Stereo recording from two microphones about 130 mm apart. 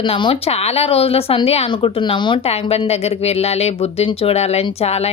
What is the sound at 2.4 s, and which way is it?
A woman's voice, 50° left (ahead or behind).